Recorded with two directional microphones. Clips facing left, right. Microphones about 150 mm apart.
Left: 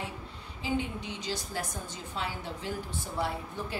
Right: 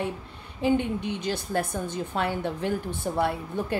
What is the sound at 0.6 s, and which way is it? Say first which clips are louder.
A woman's voice: right 8 dB; 60° right (ahead or behind).